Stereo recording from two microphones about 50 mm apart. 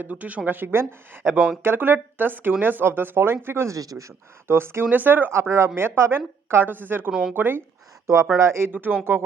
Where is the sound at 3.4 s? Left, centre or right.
Right.